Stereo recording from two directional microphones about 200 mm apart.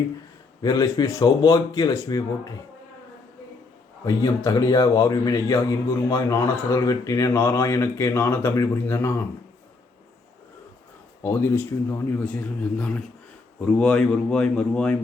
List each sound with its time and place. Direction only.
0.6 s speech: 20° left (ahead or behind)
4.0 s a man's voice: 20° left (ahead or behind)
11.2 s a man's voice: 15° left (ahead or behind)